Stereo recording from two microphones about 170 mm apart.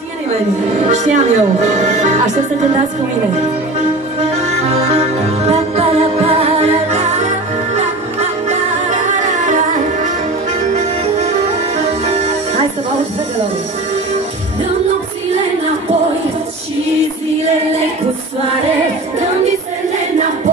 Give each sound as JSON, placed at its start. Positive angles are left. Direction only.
{"t": 0.8, "sound": "speech", "side_deg": -45}
{"t": 4.2, "sound": "music", "side_deg": -40}